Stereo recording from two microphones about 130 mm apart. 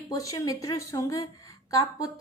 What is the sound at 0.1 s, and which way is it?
A woman's voice, 25° left (ahead or behind).